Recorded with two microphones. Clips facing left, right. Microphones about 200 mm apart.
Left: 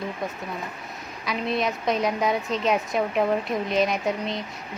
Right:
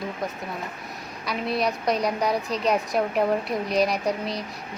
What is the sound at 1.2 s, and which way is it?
A woman's voice, centre (ahead or behind).